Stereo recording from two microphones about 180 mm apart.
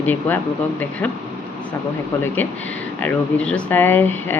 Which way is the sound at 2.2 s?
10° left (ahead or behind).